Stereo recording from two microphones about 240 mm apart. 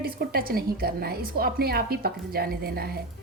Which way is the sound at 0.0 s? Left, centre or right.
Right.